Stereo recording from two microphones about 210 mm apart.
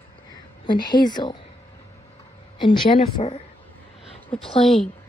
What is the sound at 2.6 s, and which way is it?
A woman's voice, 25° left (ahead or behind).